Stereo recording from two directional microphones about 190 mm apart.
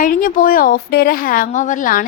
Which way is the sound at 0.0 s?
45° left (ahead or behind).